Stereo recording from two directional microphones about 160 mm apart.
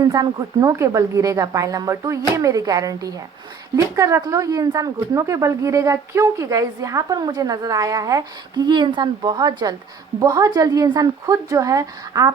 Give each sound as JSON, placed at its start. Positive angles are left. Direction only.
{"t": 0.0, "sound": "a woman's voice", "side_deg": -25}